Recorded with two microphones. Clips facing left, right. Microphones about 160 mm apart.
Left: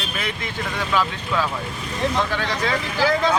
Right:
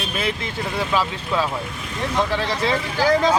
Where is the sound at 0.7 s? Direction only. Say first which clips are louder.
Even; 30° right (ahead or behind).